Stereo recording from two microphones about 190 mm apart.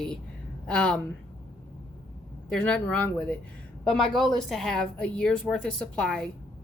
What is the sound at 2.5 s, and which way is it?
Speech, 5° left (ahead or behind).